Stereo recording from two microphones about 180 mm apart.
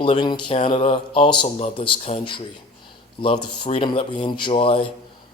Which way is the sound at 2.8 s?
30° left (ahead or behind).